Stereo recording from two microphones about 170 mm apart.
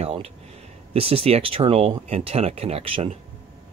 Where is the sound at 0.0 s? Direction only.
35° right (ahead or behind).